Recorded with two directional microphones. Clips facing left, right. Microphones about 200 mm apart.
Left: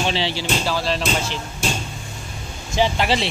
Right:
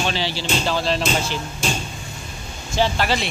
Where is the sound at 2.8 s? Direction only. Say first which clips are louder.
Left 1 dB; 25° left (ahead or behind).